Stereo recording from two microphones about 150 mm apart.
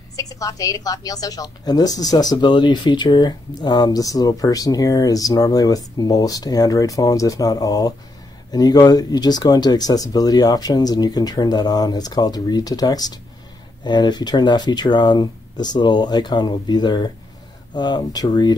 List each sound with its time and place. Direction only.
0.1 s a woman's voice: 25° left (ahead or behind)